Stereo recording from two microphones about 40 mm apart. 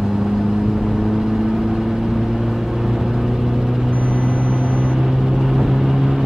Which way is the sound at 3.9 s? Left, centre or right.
Right.